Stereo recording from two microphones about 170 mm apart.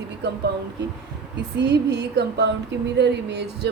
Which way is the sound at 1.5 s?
90° right.